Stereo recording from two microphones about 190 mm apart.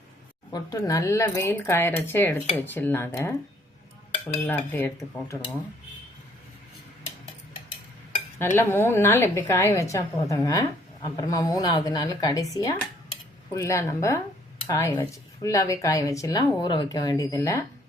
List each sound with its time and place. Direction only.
0.5 s speech: 20° left (ahead or behind)
4.4 s speech: 10° left (ahead or behind)
8.4 s speech: 10° left (ahead or behind)